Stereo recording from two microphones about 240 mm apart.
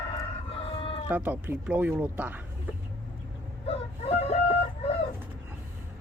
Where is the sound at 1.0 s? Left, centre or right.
Centre.